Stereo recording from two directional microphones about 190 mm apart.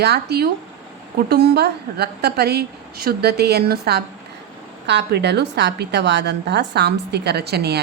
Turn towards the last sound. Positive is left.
turn(degrees=-55)  # may be behind; listen again after turning